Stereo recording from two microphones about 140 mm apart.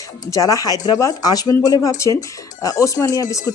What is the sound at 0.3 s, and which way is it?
Speech, 25° left (ahead or behind).